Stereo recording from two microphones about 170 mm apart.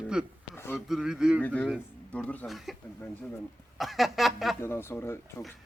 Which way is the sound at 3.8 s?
Centre (ahead or behind).